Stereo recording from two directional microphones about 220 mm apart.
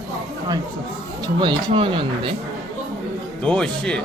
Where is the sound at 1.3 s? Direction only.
20° right (ahead or behind).